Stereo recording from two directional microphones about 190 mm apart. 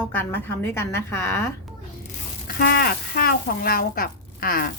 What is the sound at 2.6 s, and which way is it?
Speech, 55° left (ahead or behind).